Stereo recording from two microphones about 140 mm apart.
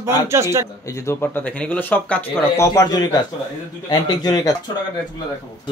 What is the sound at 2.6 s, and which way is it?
Speech, 25° left (ahead or behind).